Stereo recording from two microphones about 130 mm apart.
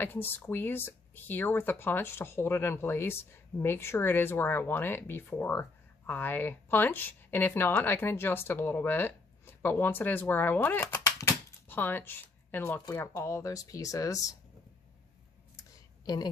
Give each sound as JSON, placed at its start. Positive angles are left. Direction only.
{"t": 0.0, "sound": "speech", "side_deg": 15}
{"t": 11.1, "sound": "a sound", "side_deg": 20}
{"t": 12.9, "sound": "speech", "side_deg": 20}
{"t": 15.5, "sound": "clicking", "side_deg": 25}